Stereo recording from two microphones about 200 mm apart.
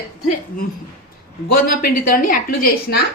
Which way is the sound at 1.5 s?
45° left (ahead or behind).